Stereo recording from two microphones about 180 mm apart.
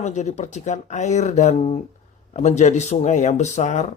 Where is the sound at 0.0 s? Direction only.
40° left (ahead or behind).